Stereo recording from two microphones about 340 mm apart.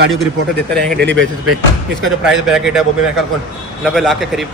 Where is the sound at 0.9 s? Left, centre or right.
Right.